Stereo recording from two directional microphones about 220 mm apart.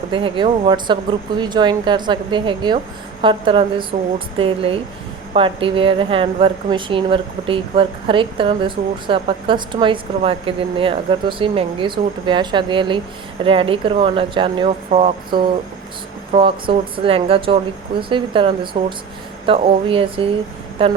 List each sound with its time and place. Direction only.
0.1 s a woman's voice: 25° right (ahead or behind)